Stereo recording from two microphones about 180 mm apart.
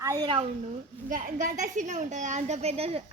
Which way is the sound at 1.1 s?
45° right (ahead or behind).